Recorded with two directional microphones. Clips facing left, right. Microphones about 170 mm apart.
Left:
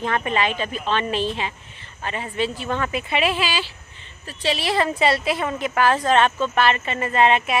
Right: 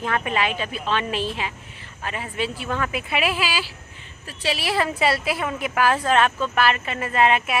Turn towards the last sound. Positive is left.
turn(degrees=-5)  # may be behind; listen again after turning